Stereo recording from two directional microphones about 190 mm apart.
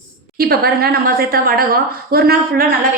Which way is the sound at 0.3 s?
55° right (ahead or behind).